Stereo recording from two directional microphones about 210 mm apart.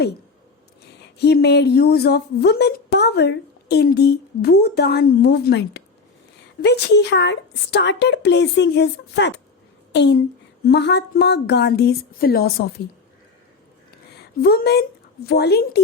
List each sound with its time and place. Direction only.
1.2 s a woman's voice: 50° left (ahead or behind)
14.2 s speech: 50° left (ahead or behind)